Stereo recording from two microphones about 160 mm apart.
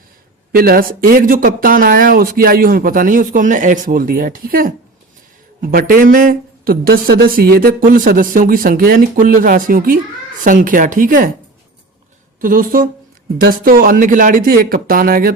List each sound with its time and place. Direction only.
0.5 s a woman's voice: 65° right (ahead or behind)
12.4 s a woman's voice: 60° right (ahead or behind)